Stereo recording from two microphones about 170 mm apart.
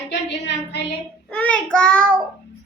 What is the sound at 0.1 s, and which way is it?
Speech, 90° left.